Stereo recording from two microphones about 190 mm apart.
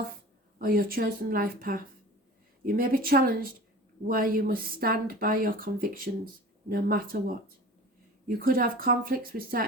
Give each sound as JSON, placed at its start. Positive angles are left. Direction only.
{"t": 0.6, "sound": "speech", "side_deg": -50}